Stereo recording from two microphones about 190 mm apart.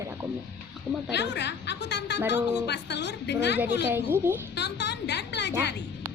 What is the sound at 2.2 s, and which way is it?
Speech, 10° right (ahead or behind).